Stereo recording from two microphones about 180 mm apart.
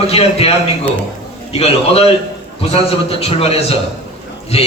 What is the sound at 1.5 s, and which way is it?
A man's voice, 35° left (ahead or behind).